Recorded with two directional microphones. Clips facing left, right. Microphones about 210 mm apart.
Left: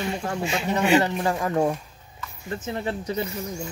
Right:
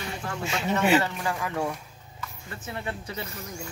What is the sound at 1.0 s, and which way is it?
Speech, 40° left (ahead or behind).